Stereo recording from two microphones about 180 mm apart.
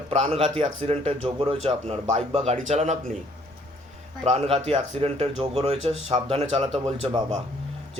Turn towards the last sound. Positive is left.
turn(degrees=-25)  # may be behind; listen again after turning